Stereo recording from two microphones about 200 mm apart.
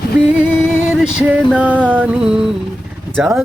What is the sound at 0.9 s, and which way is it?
Music, 5° right (ahead or behind).